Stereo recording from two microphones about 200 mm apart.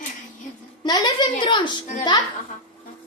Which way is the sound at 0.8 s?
20° left (ahead or behind).